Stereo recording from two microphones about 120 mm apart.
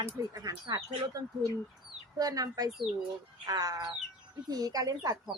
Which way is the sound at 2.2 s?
30° right (ahead or behind).